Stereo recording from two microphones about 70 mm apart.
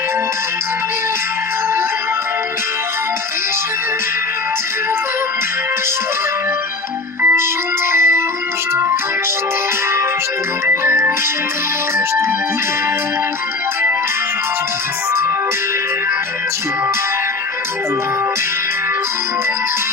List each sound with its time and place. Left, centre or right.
7.2 s organ: right
7.9 s a sound: right
8.7 s keyboard: right
10.7 s music: right